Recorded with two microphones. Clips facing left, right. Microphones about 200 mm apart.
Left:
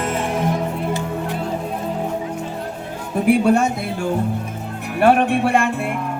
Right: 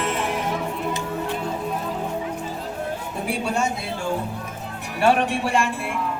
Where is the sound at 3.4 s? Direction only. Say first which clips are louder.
Left 8 dB; 60° left (ahead or behind).